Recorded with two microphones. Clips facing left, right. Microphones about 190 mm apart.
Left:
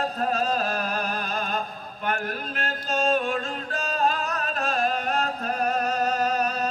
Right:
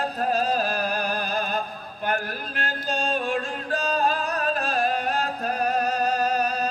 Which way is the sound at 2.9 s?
35° right (ahead or behind).